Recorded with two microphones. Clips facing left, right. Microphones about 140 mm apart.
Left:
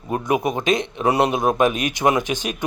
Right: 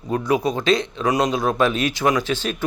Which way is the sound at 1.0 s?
30° left (ahead or behind).